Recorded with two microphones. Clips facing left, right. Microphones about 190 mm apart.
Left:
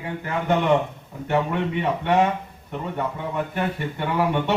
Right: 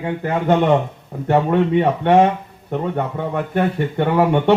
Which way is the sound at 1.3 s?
55° right (ahead or behind).